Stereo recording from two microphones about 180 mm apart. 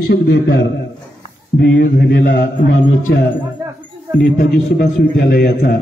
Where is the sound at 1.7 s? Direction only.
50° left (ahead or behind).